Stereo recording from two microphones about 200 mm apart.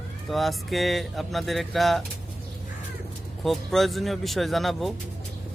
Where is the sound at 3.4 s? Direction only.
Centre (ahead or behind).